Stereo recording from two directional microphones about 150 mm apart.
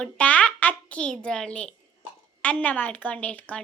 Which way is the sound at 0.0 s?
10° left (ahead or behind).